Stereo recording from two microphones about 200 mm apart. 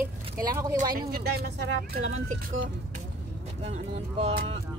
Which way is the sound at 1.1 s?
50° right (ahead or behind).